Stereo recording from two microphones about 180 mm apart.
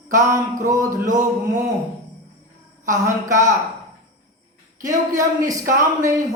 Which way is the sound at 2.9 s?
15° right (ahead or behind).